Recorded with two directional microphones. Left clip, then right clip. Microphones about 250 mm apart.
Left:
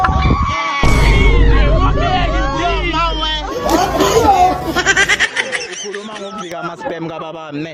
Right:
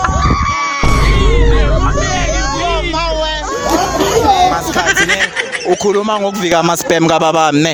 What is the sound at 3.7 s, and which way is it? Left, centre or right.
Chatter, centre.